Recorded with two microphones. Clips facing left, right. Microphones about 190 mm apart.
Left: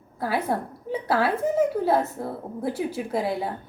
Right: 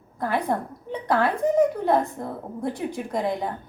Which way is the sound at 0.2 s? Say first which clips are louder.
Right 1 dB; 5° left (ahead or behind).